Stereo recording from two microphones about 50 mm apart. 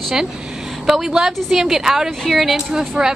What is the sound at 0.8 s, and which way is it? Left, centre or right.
A woman's voice, centre.